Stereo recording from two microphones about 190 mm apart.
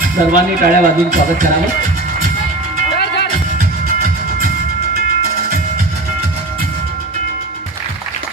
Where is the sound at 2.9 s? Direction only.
60° left (ahead or behind).